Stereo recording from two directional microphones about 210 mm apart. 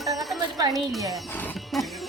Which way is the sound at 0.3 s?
20° right (ahead or behind).